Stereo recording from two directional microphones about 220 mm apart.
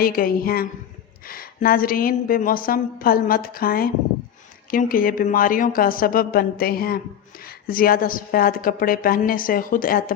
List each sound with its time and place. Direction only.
0.0 s a woman's voice: 40° left (ahead or behind)